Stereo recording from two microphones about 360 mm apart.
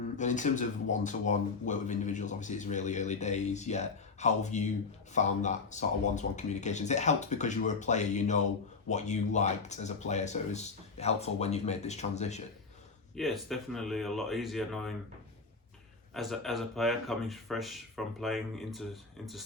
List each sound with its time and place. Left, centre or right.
0.2 s speech: centre
13.1 s speech: centre
16.1 s speech: centre